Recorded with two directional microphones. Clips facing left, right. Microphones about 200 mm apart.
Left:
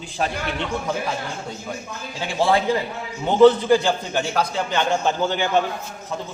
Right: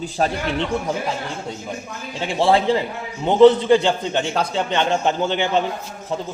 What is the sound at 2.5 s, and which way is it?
A man's voice, 25° right (ahead or behind).